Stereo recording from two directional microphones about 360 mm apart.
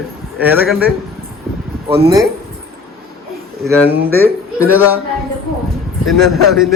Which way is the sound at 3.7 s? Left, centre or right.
Centre.